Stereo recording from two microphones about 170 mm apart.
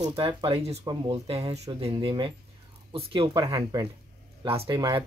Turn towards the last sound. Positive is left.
turn(degrees=-20)  # may be behind; listen again after turning